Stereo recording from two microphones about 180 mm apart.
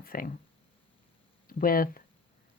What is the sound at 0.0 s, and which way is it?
Speech, 50° left (ahead or behind).